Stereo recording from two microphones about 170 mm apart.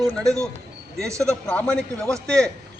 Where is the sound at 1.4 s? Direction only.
5° left (ahead or behind).